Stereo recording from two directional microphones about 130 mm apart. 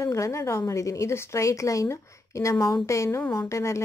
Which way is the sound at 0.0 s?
25° left (ahead or behind).